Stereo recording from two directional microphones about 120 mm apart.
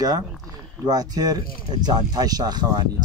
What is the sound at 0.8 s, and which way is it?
Speech, 35° right (ahead or behind).